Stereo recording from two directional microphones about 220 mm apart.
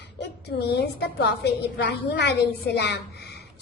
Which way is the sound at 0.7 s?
50° left (ahead or behind).